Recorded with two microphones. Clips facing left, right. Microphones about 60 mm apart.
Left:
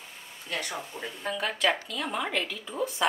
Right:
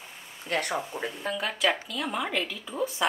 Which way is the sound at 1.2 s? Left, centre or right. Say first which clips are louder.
Left 1 dB; centre.